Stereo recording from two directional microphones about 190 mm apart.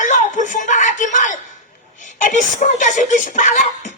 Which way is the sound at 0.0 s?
40° left (ahead or behind).